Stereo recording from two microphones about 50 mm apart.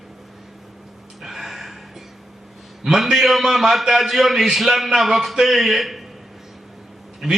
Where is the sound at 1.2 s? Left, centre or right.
Centre.